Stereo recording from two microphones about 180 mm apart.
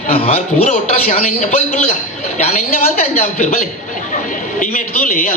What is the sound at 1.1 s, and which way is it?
A man's voice, 45° left (ahead or behind).